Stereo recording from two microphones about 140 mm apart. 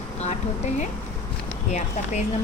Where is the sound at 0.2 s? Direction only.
55° left (ahead or behind).